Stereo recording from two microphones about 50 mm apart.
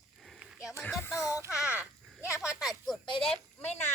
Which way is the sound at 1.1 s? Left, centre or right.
Left.